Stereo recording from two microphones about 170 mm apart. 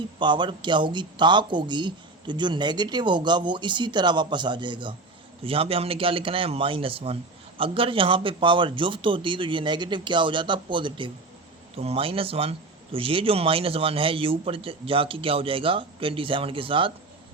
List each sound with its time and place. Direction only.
0.2 s speech: 25° right (ahead or behind)